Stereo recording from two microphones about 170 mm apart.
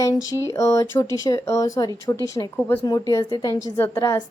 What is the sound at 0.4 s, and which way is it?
A woman's voice, 20° left (ahead or behind).